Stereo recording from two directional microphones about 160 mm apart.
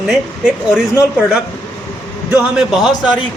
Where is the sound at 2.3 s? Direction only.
5° right (ahead or behind).